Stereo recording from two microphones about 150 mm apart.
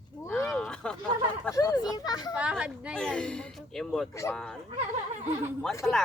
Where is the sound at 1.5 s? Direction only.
25° left (ahead or behind).